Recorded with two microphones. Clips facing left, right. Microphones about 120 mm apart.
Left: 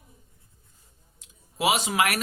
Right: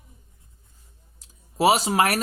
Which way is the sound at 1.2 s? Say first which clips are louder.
Right 6 dB; 40° right (ahead or behind).